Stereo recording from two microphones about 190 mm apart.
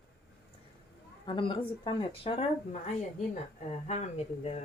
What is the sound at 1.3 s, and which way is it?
Speech, 25° left (ahead or behind).